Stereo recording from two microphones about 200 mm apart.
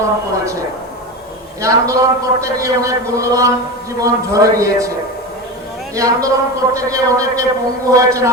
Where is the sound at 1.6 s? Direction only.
15° right (ahead or behind).